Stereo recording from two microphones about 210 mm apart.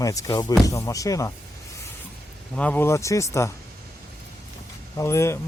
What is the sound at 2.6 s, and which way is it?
Speech, 10° left (ahead or behind).